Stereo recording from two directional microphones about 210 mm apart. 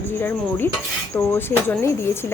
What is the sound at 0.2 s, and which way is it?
Speech, 10° left (ahead or behind).